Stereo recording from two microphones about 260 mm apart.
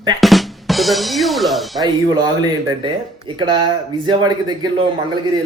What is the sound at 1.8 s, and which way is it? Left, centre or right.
Speech, centre.